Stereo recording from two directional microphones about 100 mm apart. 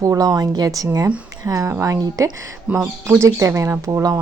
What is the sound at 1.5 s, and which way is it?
Speech, 30° right (ahead or behind).